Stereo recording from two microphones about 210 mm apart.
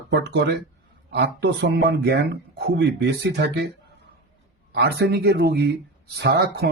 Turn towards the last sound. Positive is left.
turn(degrees=-50)  # may be behind; listen again after turning